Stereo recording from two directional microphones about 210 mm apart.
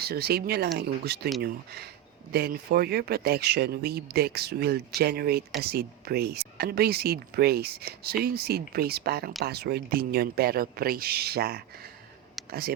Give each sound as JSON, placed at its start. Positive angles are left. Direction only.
{"t": 0.0, "sound": "speech", "side_deg": -50}